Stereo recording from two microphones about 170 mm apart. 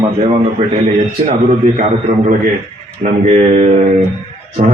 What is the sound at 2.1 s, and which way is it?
A man's voice, 45° right (ahead or behind).